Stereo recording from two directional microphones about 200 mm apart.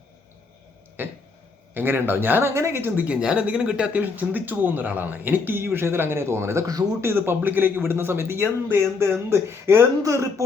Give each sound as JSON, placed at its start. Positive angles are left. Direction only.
{"t": 1.0, "sound": "speech", "side_deg": -10}